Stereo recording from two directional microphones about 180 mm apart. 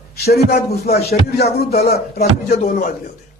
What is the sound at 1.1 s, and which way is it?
Speech, 60° left (ahead or behind).